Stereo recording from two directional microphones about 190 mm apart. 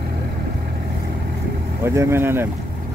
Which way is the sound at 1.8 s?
15° right (ahead or behind).